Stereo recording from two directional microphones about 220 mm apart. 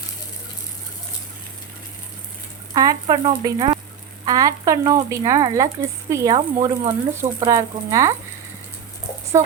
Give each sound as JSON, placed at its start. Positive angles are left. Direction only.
{"t": 2.7, "sound": "speech", "side_deg": -15}